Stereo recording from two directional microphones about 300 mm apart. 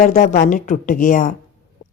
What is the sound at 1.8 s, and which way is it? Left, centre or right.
Music, left.